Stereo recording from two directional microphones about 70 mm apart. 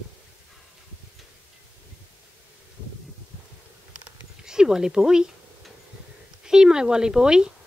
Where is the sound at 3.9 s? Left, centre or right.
Centre.